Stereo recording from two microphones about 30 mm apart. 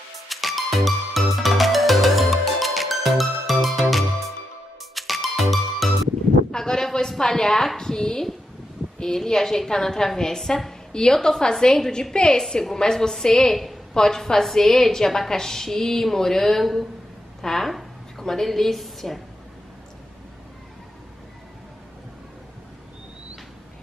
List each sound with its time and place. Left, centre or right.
0.3 s music: centre
6.5 s a sound: left
9.0 s a woman's voice: centre